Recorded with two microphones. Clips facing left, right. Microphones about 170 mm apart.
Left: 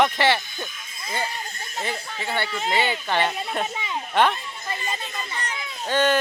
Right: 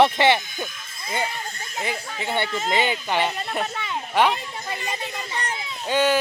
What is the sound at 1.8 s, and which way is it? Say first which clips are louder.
Speech: right 1 dB; 10° right (ahead or behind).